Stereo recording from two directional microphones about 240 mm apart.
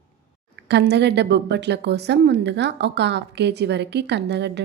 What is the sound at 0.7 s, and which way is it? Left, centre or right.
A woman's voice, right.